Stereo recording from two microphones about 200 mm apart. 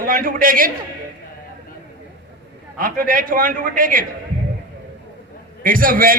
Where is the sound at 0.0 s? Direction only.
45° right (ahead or behind).